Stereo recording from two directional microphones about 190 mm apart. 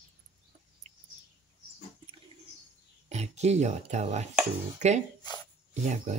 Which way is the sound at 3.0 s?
35° right (ahead or behind).